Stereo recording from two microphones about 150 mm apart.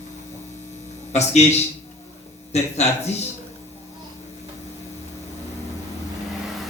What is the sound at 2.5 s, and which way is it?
Speech, 45° left (ahead or behind).